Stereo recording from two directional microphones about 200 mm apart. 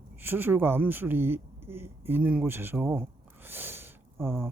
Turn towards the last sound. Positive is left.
turn(degrees=-15)  # may be behind; listen again after turning